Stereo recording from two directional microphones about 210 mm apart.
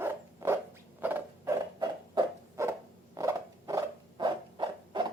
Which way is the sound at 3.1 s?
15° right (ahead or behind).